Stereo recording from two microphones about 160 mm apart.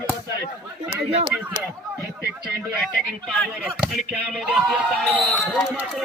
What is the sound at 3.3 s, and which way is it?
Speech, 5° left (ahead or behind).